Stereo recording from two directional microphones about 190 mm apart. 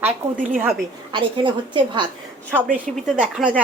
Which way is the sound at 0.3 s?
45° right (ahead or behind).